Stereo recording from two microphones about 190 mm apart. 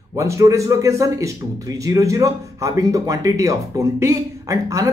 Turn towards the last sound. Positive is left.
turn(degrees=-15)  # may be behind; listen again after turning